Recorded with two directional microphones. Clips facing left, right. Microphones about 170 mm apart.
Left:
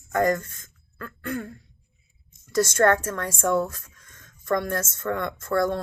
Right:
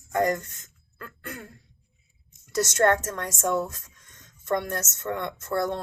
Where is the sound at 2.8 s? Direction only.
20° right (ahead or behind).